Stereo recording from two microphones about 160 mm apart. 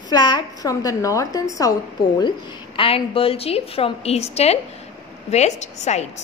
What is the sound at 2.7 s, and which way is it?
A woman's voice, 35° left (ahead or behind).